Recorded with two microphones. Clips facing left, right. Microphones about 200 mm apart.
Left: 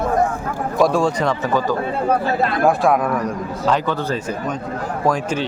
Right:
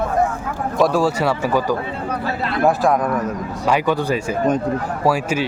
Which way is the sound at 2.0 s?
50° left (ahead or behind).